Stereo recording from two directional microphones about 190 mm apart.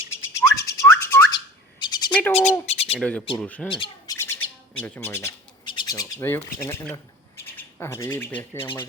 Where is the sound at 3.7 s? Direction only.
25° left (ahead or behind).